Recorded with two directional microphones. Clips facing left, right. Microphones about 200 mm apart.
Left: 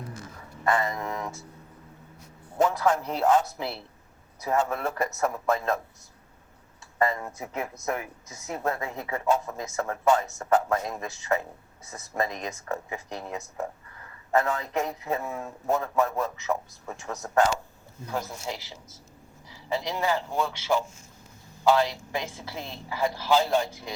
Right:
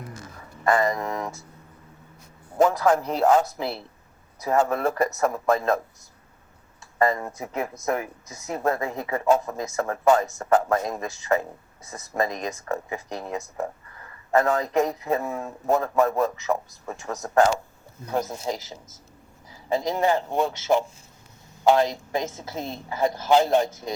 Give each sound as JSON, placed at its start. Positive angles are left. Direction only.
{"t": 0.6, "sound": "speech", "side_deg": -45}
{"t": 2.6, "sound": "a man's voice", "side_deg": -50}
{"t": 7.0, "sound": "a man's voice", "side_deg": -40}
{"t": 21.8, "sound": "a man's voice", "side_deg": -45}
{"t": 23.3, "sound": "a man's voice", "side_deg": -20}
{"t": 23.6, "sound": "a man's voice", "side_deg": -45}